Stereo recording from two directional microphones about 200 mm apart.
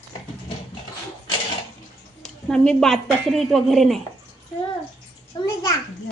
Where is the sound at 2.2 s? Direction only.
5° left (ahead or behind).